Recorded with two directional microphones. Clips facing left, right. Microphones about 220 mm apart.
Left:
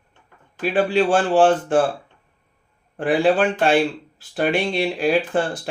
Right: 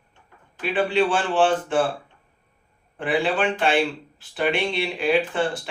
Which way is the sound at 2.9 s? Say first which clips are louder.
Left 5 dB; 45° left (ahead or behind).